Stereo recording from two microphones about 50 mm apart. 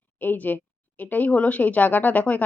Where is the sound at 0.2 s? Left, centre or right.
Left.